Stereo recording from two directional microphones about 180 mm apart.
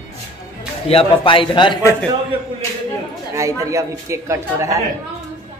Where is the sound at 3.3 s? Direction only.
15° right (ahead or behind).